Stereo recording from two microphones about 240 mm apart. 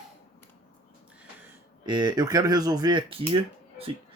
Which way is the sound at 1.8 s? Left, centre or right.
Centre.